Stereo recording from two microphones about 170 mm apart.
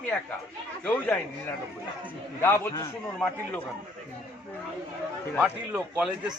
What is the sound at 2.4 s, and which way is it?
Speech, 15° left (ahead or behind).